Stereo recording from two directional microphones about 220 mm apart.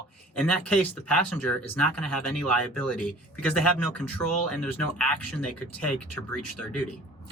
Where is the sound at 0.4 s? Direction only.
5° left (ahead or behind).